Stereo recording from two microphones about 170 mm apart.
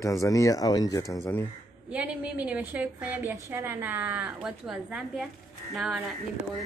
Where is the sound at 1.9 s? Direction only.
5° right (ahead or behind).